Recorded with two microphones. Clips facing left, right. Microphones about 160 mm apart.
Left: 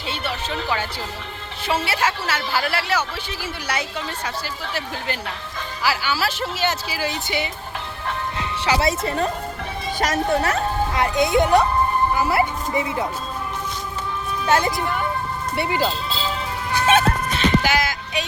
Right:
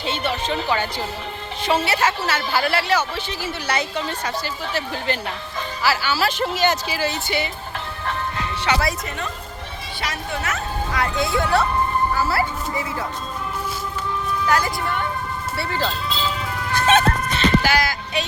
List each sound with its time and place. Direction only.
0.0 s a woman's voice: 5° left (ahead or behind)
8.6 s speech: 25° left (ahead or behind)
10.0 s a child's voice: 40° left (ahead or behind)
10.9 s speech: 20° left (ahead or behind)
14.4 s a woman's voice: 25° left (ahead or behind)
16.7 s music: 5° left (ahead or behind)
17.6 s a sound: 15° left (ahead or behind)